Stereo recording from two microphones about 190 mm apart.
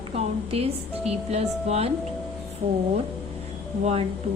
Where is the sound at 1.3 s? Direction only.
35° right (ahead or behind).